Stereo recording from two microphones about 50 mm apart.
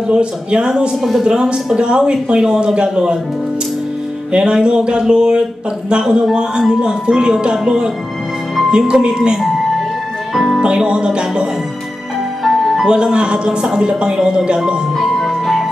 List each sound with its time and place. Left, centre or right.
0.1 s speech: centre
4.3 s speech: centre
10.3 s speech: centre
10.6 s speech: centre
12.4 s music: centre
12.8 s speech: centre
15.0 s music: centre